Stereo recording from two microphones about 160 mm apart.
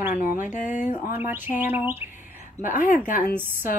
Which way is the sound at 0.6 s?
50° left (ahead or behind).